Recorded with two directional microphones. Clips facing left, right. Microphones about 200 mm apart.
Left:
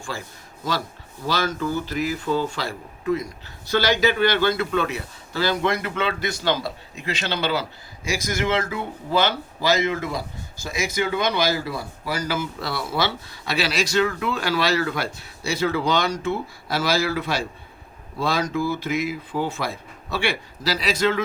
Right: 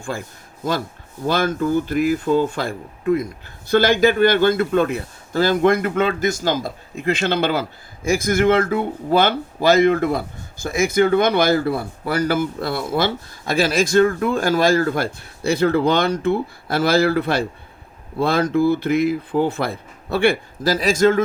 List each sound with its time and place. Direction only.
0.1 s a man's voice: 50° right (ahead or behind)
1.3 s a man's voice: 55° right (ahead or behind)